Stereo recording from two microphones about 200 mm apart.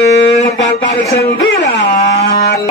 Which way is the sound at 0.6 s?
65° left (ahead or behind).